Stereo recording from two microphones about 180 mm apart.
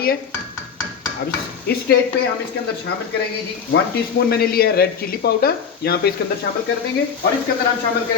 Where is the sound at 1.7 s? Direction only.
60° left (ahead or behind).